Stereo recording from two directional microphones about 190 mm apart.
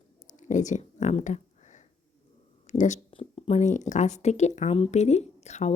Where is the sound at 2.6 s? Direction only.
40° left (ahead or behind).